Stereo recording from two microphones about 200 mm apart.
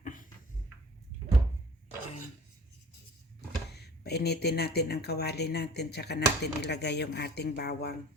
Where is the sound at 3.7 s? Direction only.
55° left (ahead or behind).